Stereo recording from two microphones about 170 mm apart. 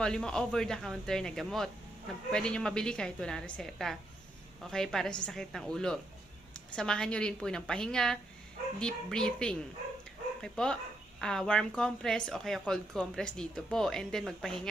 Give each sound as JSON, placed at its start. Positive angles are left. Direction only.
{"t": 0.0, "sound": "a woman's voice", "side_deg": 5}